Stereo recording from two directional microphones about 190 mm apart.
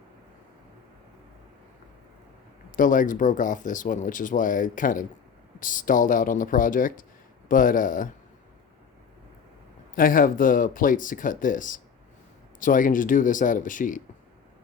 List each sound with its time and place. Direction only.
2.7 s speech: 45° left (ahead or behind)
9.9 s speech: 45° left (ahead or behind)